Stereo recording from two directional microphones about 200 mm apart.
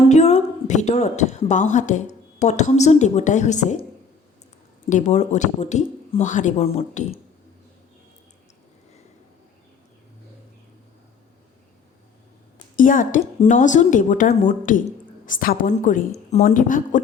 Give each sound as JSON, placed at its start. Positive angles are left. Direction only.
{"t": 0.0, "sound": "speech", "side_deg": 35}
{"t": 4.9, "sound": "speech", "side_deg": 35}
{"t": 12.7, "sound": "a woman's voice", "side_deg": 40}